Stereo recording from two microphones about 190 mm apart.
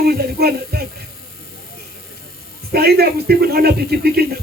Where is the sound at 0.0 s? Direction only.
55° right (ahead or behind).